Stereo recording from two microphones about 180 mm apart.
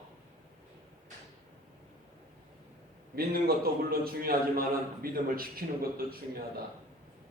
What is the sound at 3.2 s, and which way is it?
A man's voice, 60° right (ahead or behind).